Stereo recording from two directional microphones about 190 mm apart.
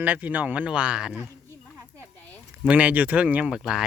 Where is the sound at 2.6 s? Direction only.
5° right (ahead or behind).